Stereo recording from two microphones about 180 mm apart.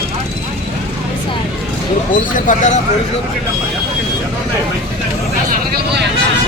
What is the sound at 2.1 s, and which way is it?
Speech, 45° left (ahead or behind).